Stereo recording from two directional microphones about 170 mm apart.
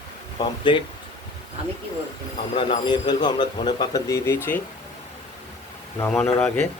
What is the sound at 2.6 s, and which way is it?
A man's voice, 30° left (ahead or behind).